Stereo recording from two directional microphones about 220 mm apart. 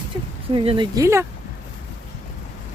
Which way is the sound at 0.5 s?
25° right (ahead or behind).